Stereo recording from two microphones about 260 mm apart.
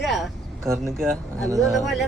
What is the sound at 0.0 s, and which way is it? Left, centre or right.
Vehicle, centre.